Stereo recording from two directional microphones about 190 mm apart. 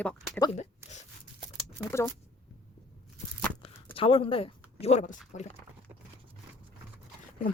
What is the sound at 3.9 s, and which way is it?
Speech, 30° left (ahead or behind).